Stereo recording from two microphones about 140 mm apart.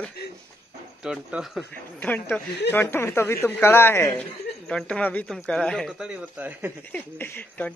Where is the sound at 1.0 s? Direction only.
5° right (ahead or behind).